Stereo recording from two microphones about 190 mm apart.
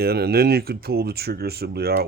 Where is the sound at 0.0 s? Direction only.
55° right (ahead or behind).